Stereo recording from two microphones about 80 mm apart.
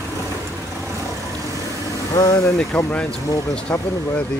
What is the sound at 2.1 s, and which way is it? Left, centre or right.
Speech, left.